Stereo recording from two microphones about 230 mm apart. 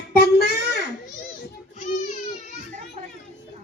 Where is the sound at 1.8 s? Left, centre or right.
Left.